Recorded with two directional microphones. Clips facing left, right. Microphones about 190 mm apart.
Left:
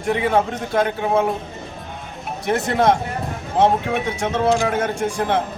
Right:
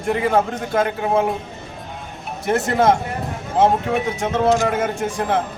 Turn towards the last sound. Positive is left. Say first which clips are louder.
# left 1 dB
turn(degrees=0)  # may be behind; listen again after turning